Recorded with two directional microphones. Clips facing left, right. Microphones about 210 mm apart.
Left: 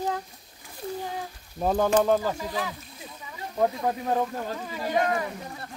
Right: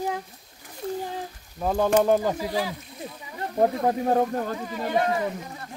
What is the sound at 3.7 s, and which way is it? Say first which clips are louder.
Speech: right 4 dB; 45° right (ahead or behind).